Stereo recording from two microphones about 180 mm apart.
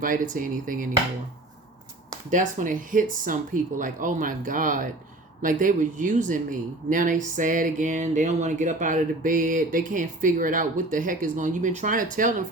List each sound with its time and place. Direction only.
0.0 s speech: 50° right (ahead or behind)
2.3 s speech: 45° right (ahead or behind)